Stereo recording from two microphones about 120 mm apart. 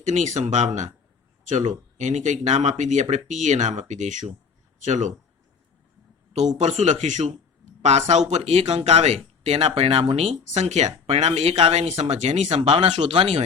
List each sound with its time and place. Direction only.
0.0 s speech: 85° right
1.5 s speech: 90° right
6.6 s speech: 75° right (ahead or behind); by 13.4 s 55° right (ahead or behind)